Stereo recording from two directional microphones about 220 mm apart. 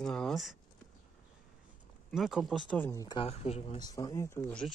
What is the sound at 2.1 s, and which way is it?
Speech, centre (ahead or behind).